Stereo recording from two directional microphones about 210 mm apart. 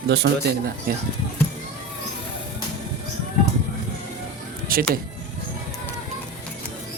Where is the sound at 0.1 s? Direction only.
50° right (ahead or behind).